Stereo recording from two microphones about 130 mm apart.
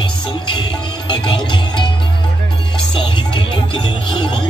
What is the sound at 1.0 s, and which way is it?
Music, 40° left (ahead or behind).